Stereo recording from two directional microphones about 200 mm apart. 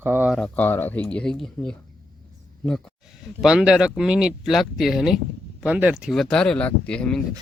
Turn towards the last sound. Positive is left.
turn(degrees=5)  # may be behind; listen again after turning